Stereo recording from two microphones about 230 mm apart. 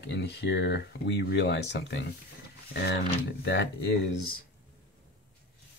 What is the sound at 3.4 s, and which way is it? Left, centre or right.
Speech, left.